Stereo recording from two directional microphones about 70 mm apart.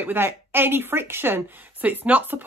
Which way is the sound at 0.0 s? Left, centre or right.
Right.